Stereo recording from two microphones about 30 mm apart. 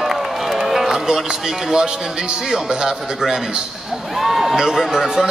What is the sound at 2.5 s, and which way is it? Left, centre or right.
Speech, right.